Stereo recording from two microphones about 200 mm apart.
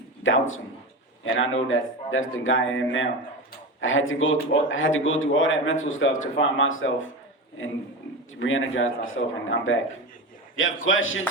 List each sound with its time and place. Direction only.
0.2 s speech: 80° left
8.4 s a man's voice: 75° left (ahead or behind)